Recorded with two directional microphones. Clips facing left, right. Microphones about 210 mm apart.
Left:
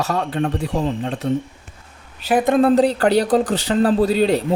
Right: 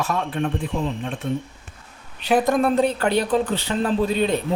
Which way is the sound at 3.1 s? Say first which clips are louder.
Left 4 dB; 85° left.